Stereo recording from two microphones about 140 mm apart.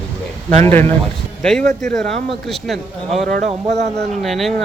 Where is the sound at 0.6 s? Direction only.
15° left (ahead or behind).